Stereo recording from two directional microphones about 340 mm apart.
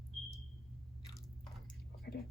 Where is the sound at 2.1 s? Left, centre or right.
Left.